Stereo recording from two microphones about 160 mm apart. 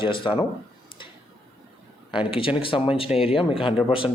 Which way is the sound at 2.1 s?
35° left (ahead or behind).